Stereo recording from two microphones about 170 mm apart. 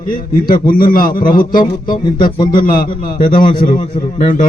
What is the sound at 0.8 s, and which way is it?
Speech, 55° left (ahead or behind).